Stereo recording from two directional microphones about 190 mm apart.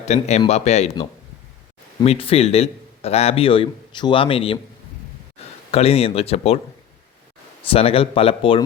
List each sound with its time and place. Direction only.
0.0 s a man's voice: 35° left (ahead or behind)
2.0 s a man's voice: 30° left (ahead or behind)
5.7 s a man's voice: 30° left (ahead or behind)
7.7 s a man's voice: 30° left (ahead or behind)